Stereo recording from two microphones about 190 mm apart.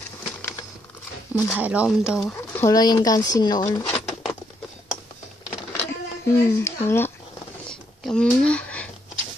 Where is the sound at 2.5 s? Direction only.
20° left (ahead or behind).